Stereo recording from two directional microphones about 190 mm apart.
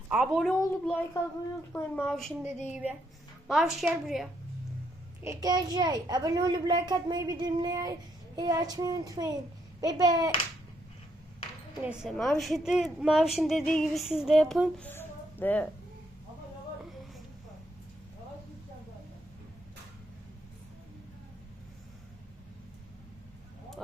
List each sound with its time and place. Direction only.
0.1 s a woman's voice: centre (ahead or behind)
3.4 s a woman's voice: centre (ahead or behind)
5.2 s a child's voice: 15° right (ahead or behind)
11.8 s a woman's voice: centre (ahead or behind)